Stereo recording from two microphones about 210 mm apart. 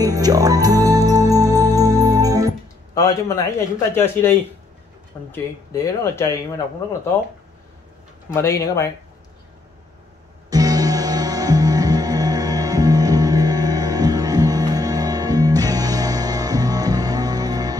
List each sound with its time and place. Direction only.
0.0 s music: 15° right (ahead or behind)
2.9 s speech: 15° left (ahead or behind)
8.3 s speech: 15° left (ahead or behind)
10.5 s music: 15° right (ahead or behind)